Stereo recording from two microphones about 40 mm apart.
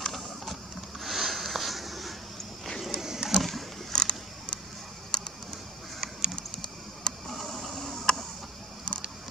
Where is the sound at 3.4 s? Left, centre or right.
Centre.